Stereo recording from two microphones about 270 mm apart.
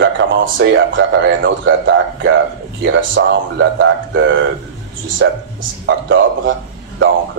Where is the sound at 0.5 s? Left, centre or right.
Right.